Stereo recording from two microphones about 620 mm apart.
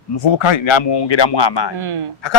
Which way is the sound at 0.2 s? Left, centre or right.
Left.